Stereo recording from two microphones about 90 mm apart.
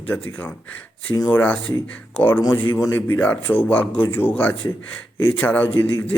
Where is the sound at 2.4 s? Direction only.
45° left (ahead or behind).